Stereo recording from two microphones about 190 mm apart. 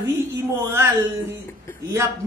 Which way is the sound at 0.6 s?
15° right (ahead or behind).